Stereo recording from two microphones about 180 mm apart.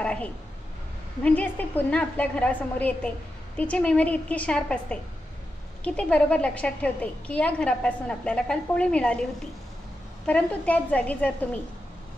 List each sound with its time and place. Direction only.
0.0 s a sound: 5° left (ahead or behind)
1.2 s a woman's voice: 10° left (ahead or behind)
10.2 s a woman's voice: 5° left (ahead or behind)